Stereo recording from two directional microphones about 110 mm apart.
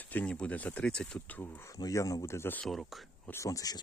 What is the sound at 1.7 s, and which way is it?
Speech, 30° left (ahead or behind).